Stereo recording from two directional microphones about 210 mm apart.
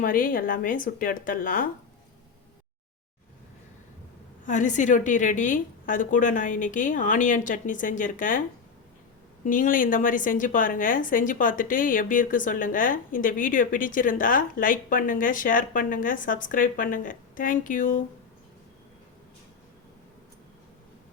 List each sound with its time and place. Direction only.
0.0 s a woman's voice: 40° left (ahead or behind)
4.4 s a woman's voice: 35° left (ahead or behind)